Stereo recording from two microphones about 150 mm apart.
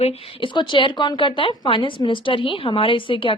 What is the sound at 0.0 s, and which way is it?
Speech, 40° left (ahead or behind).